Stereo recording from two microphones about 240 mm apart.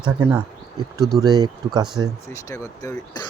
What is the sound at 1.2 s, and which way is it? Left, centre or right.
Speech, centre.